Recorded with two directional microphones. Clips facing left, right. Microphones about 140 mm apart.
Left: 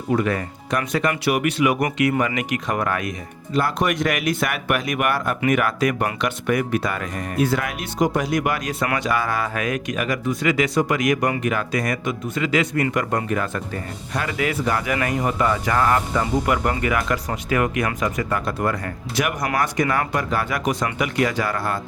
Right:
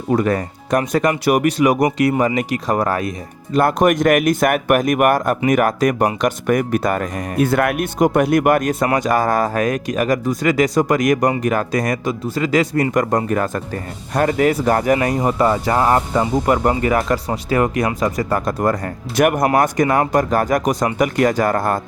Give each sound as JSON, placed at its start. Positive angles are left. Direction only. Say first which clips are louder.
{"t": 0.1, "sound": "speech", "louder": "right 4 dB", "side_deg": -40}
{"t": 3.5, "sound": "speech", "louder": "right 7 dB", "side_deg": -50}